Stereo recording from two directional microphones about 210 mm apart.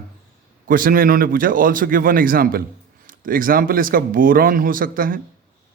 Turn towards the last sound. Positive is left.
turn(degrees=-40)  # may be behind; listen again after turning